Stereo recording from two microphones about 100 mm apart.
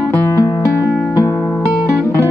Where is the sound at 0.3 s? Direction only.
35° left (ahead or behind).